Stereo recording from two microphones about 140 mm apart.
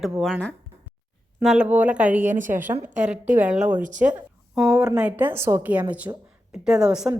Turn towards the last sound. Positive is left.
turn(degrees=-5)  # may be behind; listen again after turning